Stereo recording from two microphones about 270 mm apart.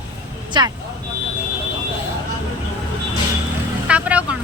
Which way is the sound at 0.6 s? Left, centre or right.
Centre.